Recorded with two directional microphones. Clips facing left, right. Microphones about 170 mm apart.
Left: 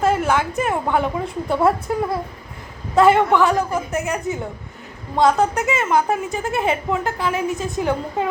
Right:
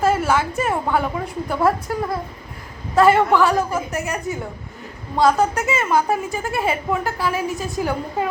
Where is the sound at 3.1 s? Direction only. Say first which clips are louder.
Even; 20° left (ahead or behind).